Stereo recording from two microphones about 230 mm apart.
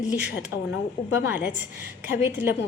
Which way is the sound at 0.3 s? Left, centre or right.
Left.